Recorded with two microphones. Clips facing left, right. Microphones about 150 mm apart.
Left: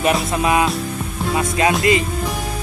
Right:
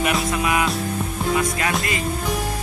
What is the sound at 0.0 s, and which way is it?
Music, 30° left (ahead or behind).